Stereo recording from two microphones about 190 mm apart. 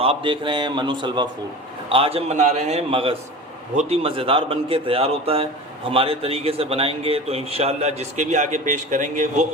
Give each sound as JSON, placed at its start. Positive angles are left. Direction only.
{"t": 0.0, "sound": "a man's voice", "side_deg": -30}